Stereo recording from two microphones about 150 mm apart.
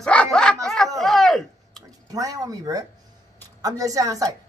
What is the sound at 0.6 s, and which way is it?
A man's voice, centre (ahead or behind).